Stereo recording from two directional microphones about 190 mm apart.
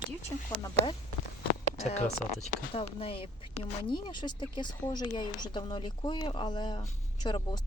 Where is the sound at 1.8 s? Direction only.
35° left (ahead or behind).